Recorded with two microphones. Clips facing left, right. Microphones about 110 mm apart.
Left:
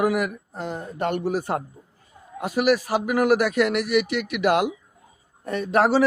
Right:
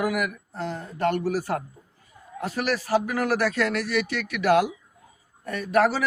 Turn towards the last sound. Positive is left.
turn(degrees=25)  # may be behind; listen again after turning